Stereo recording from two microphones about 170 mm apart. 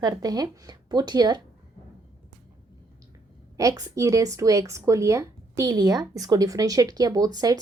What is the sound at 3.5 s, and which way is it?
Speech, 20° right (ahead or behind).